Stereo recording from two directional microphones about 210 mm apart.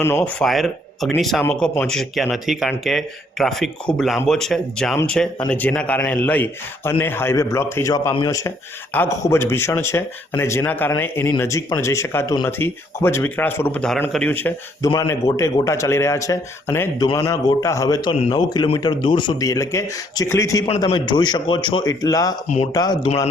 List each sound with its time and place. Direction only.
0.0 s speech: 10° left (ahead or behind)
0.4 s speech: centre (ahead or behind); by 23.0 s 20° left (ahead or behind)